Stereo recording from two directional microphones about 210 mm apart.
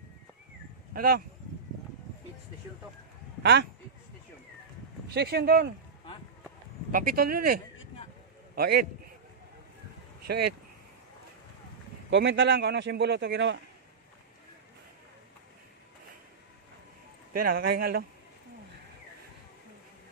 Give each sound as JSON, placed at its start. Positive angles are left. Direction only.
{"t": 0.9, "sound": "a man's voice", "side_deg": -45}
{"t": 5.1, "sound": "a man's voice", "side_deg": -50}
{"t": 6.9, "sound": "a man's voice", "side_deg": -40}
{"t": 10.2, "sound": "speech", "side_deg": -50}
{"t": 12.1, "sound": "a man's voice", "side_deg": -60}
{"t": 17.3, "sound": "a man's voice", "side_deg": -45}